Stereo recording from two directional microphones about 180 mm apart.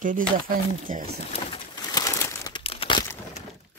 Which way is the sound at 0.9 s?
45° right (ahead or behind).